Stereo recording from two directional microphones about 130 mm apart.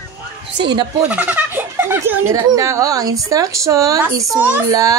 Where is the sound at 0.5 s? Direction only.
35° right (ahead or behind).